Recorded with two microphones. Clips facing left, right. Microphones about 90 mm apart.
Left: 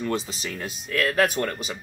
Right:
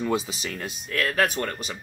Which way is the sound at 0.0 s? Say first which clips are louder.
Right 1 dB; 5° right (ahead or behind).